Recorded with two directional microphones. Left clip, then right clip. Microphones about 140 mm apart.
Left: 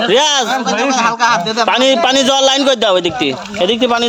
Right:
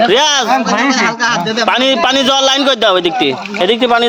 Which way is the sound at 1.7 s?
30° left (ahead or behind).